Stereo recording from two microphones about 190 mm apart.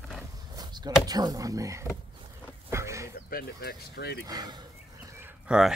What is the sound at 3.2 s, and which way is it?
Speech, 55° left (ahead or behind).